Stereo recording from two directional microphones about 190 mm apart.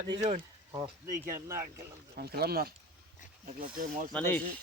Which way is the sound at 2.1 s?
55° right (ahead or behind).